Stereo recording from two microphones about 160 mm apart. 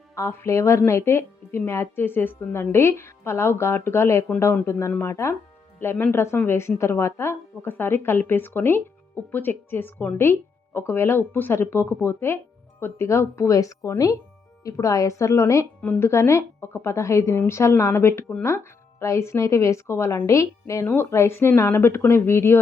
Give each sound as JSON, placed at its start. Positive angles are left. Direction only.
{"t": 0.2, "sound": "speech", "side_deg": 15}